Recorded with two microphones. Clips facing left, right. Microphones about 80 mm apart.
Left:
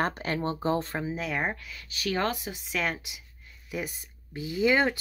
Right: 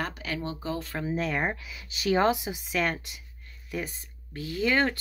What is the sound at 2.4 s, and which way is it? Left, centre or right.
Speech, centre.